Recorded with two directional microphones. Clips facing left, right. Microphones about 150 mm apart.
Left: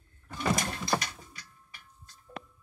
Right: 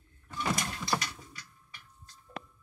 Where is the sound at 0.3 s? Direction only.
40° left (ahead or behind).